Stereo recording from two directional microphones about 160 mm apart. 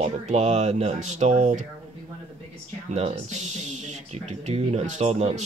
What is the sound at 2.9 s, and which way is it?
Speech, 45° right (ahead or behind).